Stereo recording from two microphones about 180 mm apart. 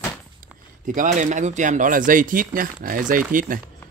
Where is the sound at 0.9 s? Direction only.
45° right (ahead or behind).